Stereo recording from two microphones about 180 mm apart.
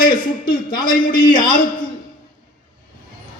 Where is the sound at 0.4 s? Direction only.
25° left (ahead or behind).